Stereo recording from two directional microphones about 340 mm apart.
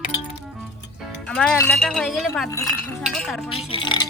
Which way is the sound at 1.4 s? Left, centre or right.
Centre.